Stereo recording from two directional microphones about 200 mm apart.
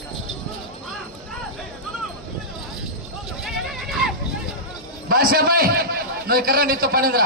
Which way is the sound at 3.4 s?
Centre (ahead or behind).